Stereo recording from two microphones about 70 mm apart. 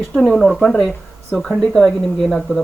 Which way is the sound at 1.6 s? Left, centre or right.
Centre.